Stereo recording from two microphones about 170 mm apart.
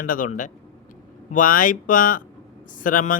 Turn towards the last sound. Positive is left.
turn(degrees=50)  # may be behind; listen again after turning